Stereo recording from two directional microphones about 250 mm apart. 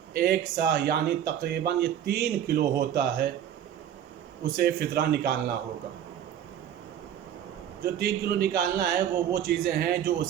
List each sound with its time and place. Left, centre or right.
0.2 s speech: right
4.5 s speech: right
7.8 s speech: right